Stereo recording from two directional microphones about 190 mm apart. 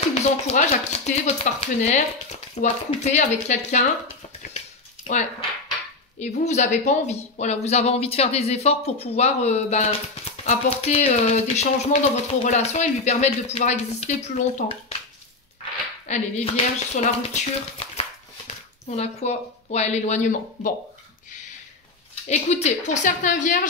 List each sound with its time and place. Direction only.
0.1 s speech: 35° left (ahead or behind)
4.6 s a sound: 40° left (ahead or behind)
6.1 s speech: 40° left (ahead or behind)
16.1 s speech: 35° left (ahead or behind)
22.3 s speech: 35° left (ahead or behind)